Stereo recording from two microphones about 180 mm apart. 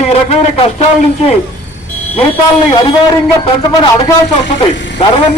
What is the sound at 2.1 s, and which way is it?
A man's voice, 30° left (ahead or behind).